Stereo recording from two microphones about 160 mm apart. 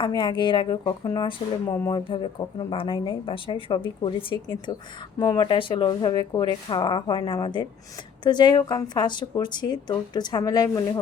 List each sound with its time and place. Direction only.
0.0 s speech: 30° left (ahead or behind)
2.0 s speech: 30° left (ahead or behind)